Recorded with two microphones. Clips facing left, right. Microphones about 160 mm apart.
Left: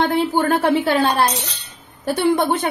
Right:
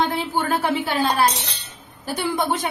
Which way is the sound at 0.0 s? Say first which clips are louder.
Left 5 dB; 60° left (ahead or behind).